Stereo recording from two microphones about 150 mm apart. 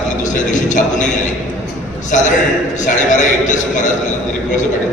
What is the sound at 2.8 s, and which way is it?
A man's voice, 55° left (ahead or behind).